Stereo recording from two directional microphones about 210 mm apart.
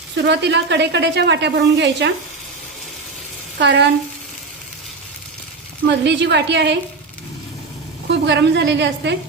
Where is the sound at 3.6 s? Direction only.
55° right (ahead or behind).